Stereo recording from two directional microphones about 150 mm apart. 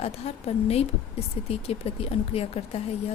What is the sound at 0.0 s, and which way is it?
A woman's voice, 45° left (ahead or behind).